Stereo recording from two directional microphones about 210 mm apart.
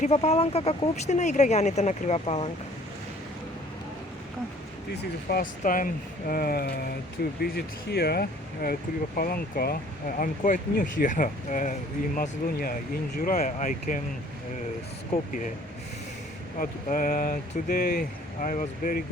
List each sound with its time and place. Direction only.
0.0 s speech: 30° left (ahead or behind)
5.3 s speech: 40° left (ahead or behind)
16.6 s speech: 40° left (ahead or behind)